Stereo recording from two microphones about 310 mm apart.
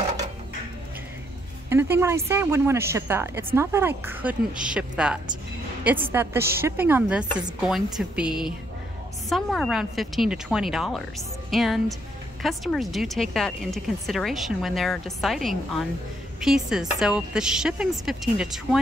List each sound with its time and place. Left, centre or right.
1.7 s speech: centre